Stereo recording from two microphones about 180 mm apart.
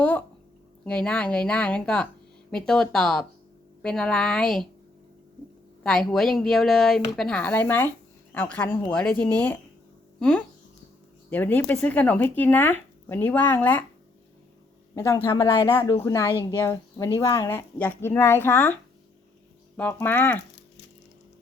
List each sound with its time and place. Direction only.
0.9 s speech: 5° left (ahead or behind)
5.8 s speech: 5° left (ahead or behind)
11.3 s speech: 10° left (ahead or behind)
14.9 s speech: 15° left (ahead or behind)